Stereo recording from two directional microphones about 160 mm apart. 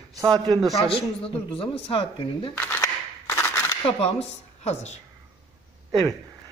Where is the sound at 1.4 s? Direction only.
35° left (ahead or behind).